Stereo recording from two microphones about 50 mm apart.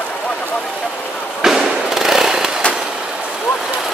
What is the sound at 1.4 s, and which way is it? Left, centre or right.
Fireworks, centre.